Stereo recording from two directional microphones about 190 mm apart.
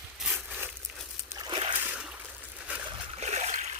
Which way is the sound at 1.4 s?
25° right (ahead or behind).